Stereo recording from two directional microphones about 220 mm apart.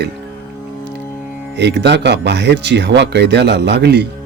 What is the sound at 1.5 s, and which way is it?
Speech, 50° right (ahead or behind).